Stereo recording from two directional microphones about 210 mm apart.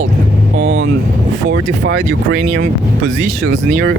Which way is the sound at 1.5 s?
55° right (ahead or behind).